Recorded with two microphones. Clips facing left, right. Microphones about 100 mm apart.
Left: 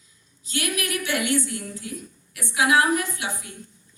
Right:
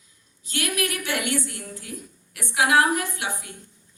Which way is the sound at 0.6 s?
45° right (ahead or behind).